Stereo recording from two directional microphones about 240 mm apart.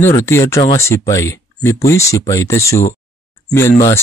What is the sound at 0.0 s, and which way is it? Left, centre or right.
Speech, centre.